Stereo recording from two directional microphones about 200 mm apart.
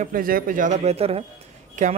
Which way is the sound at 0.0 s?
45° right (ahead or behind).